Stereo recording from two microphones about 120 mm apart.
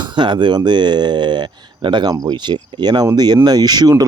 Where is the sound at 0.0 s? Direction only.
40° right (ahead or behind).